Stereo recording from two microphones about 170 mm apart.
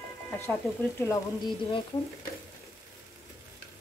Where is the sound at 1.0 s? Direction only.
20° left (ahead or behind).